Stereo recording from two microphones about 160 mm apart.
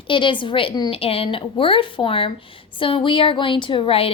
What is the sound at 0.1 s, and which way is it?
A woman's voice, 30° left (ahead or behind).